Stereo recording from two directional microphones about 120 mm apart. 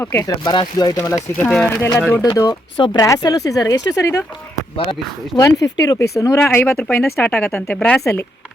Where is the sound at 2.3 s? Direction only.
30° left (ahead or behind).